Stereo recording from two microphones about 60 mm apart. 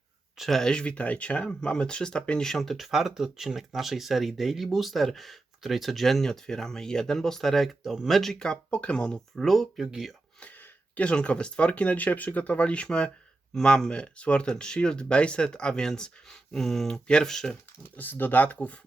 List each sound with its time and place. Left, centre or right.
0.3 s a sound: centre
0.6 s speech: centre
2.5 s speech: centre
8.4 s speech: centre
10.9 s speech: centre
17.9 s speech: left